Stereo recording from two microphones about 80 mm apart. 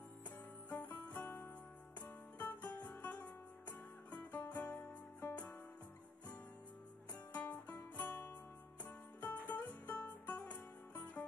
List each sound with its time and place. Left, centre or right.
0.7 s music: centre
4.5 s music: centre
7.3 s music: centre